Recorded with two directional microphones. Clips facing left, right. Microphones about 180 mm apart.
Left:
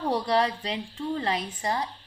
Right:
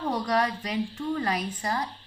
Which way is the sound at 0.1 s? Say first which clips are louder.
Left 2 dB; 30° left (ahead or behind).